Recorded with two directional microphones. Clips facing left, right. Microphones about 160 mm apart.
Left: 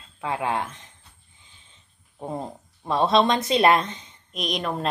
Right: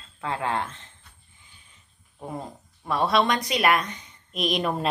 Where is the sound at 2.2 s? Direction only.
25° left (ahead or behind).